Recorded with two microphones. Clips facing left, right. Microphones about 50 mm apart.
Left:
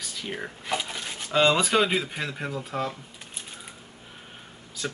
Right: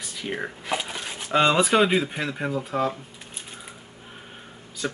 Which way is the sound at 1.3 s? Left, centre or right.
Centre.